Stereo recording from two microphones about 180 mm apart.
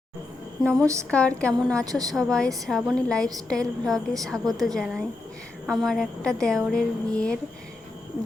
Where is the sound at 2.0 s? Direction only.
Centre (ahead or behind).